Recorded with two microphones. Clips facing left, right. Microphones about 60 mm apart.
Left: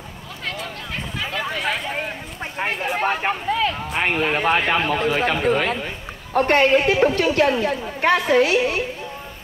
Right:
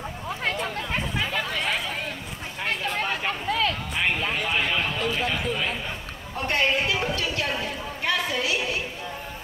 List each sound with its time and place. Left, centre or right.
3.0 s speech: left
3.4 s a sound: centre
3.9 s a woman's voice: left